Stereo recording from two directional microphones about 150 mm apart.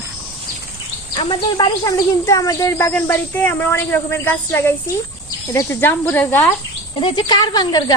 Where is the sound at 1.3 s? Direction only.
30° left (ahead or behind); by 6.5 s 15° left (ahead or behind).